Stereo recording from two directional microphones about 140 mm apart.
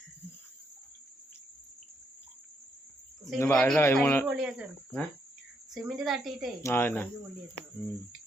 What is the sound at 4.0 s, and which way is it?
Speech, 10° left (ahead or behind).